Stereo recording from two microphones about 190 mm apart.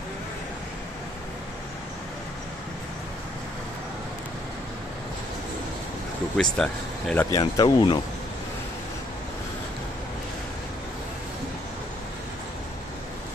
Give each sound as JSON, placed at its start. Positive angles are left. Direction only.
{"t": 6.3, "sound": "speech", "side_deg": 5}
{"t": 7.3, "sound": "speech", "side_deg": 20}